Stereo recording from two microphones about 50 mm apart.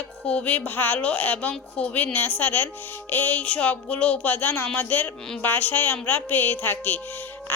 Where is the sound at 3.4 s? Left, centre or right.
Left.